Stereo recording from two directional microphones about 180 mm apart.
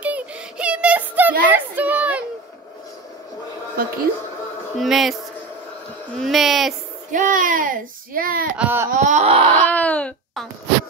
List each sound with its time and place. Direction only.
0.0 s a sound: 5° right (ahead or behind)
3.8 s speech: 55° right (ahead or behind)
4.7 s speech: centre (ahead or behind)
6.1 s speech: centre (ahead or behind)
7.1 s speech: 45° right (ahead or behind)
8.5 s a sound: 10° right (ahead or behind)
8.9 s wail: 40° right (ahead or behind)
9.7 s speech: 10° left (ahead or behind)